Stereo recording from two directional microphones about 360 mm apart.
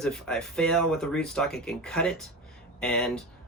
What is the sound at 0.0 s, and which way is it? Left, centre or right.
Speech, centre.